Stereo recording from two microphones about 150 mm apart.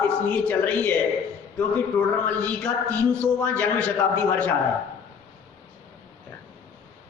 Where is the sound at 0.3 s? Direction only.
10° left (ahead or behind).